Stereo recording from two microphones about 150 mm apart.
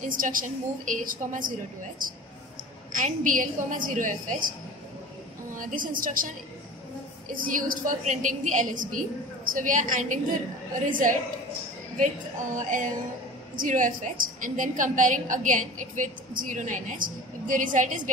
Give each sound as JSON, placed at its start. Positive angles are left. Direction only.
{"t": 0.0, "sound": "a woman's voice", "side_deg": -65}
{"t": 5.6, "sound": "a woman's voice", "side_deg": -65}
{"t": 7.3, "sound": "a woman's voice", "side_deg": -65}
{"t": 12.5, "sound": "a woman's voice", "side_deg": -60}